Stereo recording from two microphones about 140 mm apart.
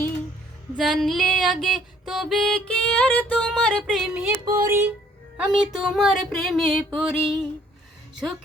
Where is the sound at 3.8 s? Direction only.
10° right (ahead or behind).